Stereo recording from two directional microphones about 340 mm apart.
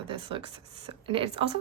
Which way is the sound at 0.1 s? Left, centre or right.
Centre.